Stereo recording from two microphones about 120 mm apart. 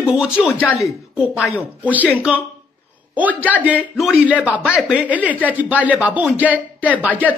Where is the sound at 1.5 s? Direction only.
10° right (ahead or behind).